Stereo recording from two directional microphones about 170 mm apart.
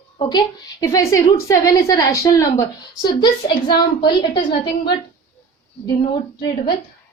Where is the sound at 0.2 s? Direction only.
25° left (ahead or behind).